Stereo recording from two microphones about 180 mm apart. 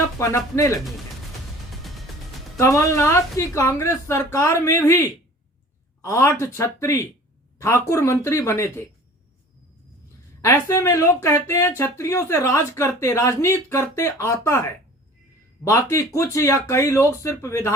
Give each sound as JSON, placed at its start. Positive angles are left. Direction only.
{"t": 0.2, "sound": "speech", "side_deg": 15}
{"t": 2.6, "sound": "speech", "side_deg": 15}
{"t": 10.4, "sound": "speech", "side_deg": 15}